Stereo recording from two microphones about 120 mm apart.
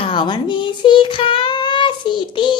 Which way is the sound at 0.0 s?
45° left (ahead or behind).